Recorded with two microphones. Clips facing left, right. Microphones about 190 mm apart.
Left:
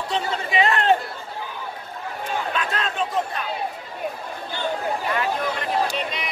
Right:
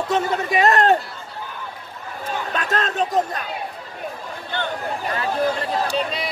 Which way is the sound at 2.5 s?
45° right (ahead or behind).